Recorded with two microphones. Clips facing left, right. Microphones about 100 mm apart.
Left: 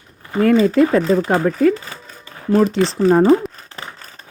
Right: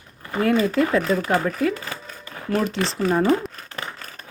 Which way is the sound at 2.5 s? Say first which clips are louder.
Left 8 dB; 35° left (ahead or behind).